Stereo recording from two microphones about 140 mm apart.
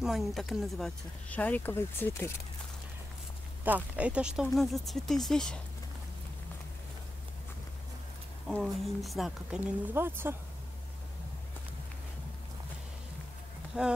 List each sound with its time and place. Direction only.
0.0 s speech: centre (ahead or behind); by 2.3 s 15° left (ahead or behind)
3.6 s speech: 10° right (ahead or behind)
8.5 s speech: centre (ahead or behind)
9.9 s speech: 15° right (ahead or behind)
13.7 s speech: 5° right (ahead or behind)